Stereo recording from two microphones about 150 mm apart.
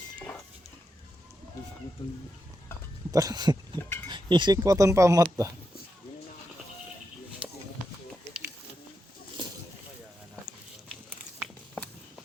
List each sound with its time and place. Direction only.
0.2 s a sound: 5° left (ahead or behind)
2.0 s speech: 35° left (ahead or behind)
3.1 s speech: 25° right (ahead or behind)
3.8 s speech: 15° left (ahead or behind)
4.1 s speech: 30° right (ahead or behind)